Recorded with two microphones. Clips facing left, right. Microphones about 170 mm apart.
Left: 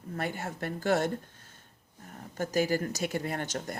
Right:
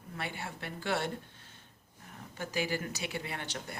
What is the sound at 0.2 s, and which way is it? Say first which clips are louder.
Speech: left 6 dB; 45° left (ahead or behind).